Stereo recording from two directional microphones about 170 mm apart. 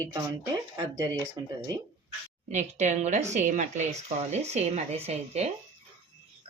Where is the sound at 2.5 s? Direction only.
45° right (ahead or behind).